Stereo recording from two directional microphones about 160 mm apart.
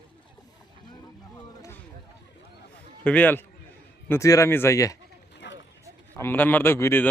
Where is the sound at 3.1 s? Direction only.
10° left (ahead or behind).